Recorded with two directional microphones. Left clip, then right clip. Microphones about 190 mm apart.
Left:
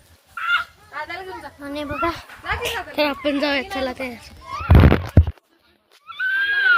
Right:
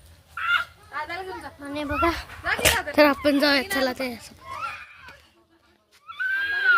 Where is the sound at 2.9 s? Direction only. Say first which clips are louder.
Right 3 dB; 35° right (ahead or behind).